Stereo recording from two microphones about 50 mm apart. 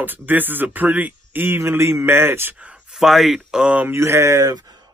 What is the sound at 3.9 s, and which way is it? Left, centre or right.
Speech, right.